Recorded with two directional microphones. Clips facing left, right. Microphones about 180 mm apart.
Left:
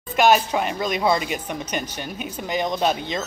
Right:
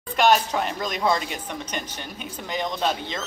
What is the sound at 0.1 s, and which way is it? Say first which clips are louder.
Speech: left 2 dB; 5° left (ahead or behind).